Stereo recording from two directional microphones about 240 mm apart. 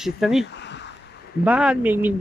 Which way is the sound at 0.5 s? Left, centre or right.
Left.